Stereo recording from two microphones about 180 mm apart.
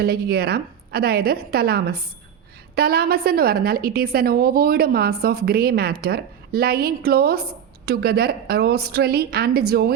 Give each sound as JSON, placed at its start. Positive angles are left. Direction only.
{"t": 0.0, "sound": "a woman's voice", "side_deg": -60}